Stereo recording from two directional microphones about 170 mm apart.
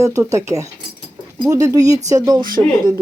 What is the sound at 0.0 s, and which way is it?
Speech, 20° right (ahead or behind).